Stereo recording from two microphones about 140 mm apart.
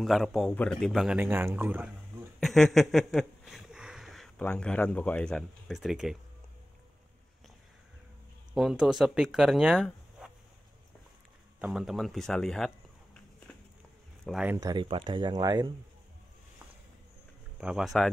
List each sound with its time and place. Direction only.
0.0 s speech: centre (ahead or behind)
1.2 s speech: 15° right (ahead or behind)
2.4 s a sound: centre (ahead or behind)
4.4 s speech: 5° left (ahead or behind)
8.5 s speech: centre (ahead or behind)
11.6 s a sound: centre (ahead or behind)
14.2 s speech: centre (ahead or behind)
14.6 s speech: 25° right (ahead or behind)
17.6 s speech: 5° right (ahead or behind)